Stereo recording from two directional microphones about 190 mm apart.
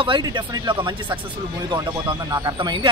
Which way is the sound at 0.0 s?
25° right (ahead or behind).